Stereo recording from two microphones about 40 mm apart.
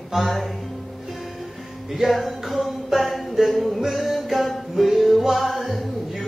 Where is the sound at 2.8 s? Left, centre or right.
Centre.